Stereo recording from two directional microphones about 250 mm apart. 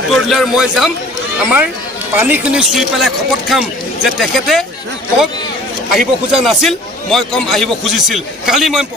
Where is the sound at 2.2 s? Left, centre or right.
Centre.